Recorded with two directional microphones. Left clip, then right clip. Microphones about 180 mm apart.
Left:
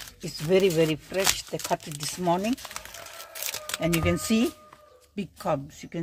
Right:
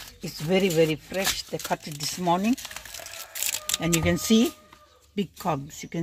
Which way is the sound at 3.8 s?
25° right (ahead or behind).